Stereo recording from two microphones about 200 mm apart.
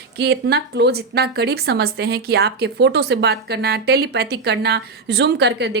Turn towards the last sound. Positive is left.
turn(degrees=-55)  # may be behind; listen again after turning